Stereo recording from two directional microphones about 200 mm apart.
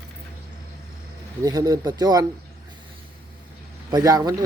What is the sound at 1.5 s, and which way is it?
Speech, 20° right (ahead or behind).